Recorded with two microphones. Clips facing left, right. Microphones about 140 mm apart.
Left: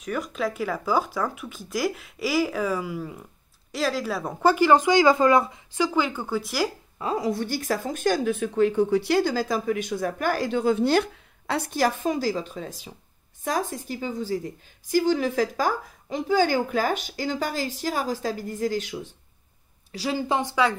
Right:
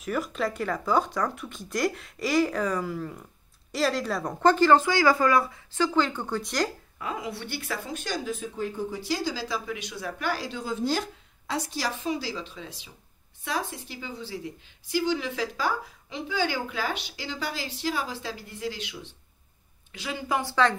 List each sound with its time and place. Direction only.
0.0 s speech: centre (ahead or behind); by 5.9 s 20° left (ahead or behind)
5.9 s speech: 5° left (ahead or behind)
7.0 s a woman's voice: 35° left (ahead or behind)